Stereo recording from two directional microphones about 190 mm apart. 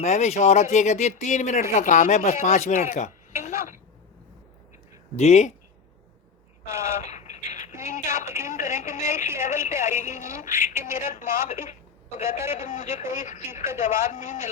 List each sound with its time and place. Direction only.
0.0 s speech: 40° left (ahead or behind)
3.4 s a sound: 45° left (ahead or behind)
5.1 s speech: 35° left (ahead or behind)
6.8 s a sound: 40° left (ahead or behind)
7.8 s telephone: 40° left (ahead or behind)
8.2 s a woman's voice: 15° right (ahead or behind)
8.4 s speech: 40° left (ahead or behind)
11.6 s a sound: 40° left (ahead or behind)
12.5 s speech: 40° left (ahead or behind)